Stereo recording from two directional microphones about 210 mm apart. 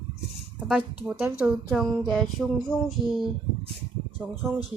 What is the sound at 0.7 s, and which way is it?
Speech, centre (ahead or behind).